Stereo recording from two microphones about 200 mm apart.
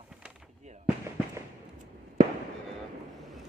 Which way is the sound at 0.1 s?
5° right (ahead or behind).